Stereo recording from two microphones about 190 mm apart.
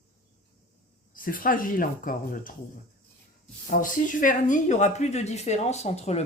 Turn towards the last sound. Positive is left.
turn(degrees=35)  # may be behind; listen again after turning